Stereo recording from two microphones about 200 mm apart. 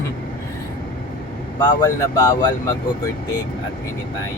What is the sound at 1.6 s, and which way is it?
Speech, 15° left (ahead or behind).